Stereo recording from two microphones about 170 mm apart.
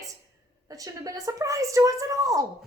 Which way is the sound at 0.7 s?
20° right (ahead or behind).